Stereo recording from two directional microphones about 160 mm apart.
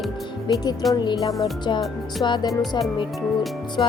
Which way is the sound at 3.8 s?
30° left (ahead or behind).